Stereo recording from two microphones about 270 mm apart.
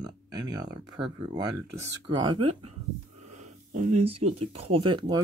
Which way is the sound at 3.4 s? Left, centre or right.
Right.